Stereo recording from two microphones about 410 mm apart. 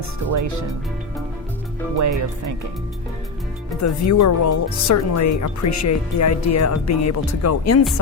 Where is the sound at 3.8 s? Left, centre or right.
Left.